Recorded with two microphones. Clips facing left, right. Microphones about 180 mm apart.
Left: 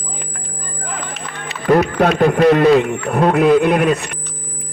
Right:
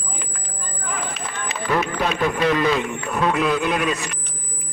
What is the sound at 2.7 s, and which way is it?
Speech, 60° left (ahead or behind).